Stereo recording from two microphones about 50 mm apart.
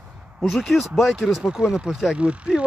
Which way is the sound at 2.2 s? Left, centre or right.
Right.